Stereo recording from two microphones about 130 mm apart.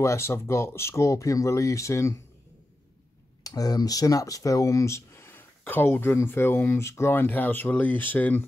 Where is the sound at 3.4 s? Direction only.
30° left (ahead or behind).